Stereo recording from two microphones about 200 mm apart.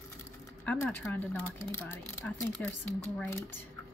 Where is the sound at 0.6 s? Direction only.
10° left (ahead or behind).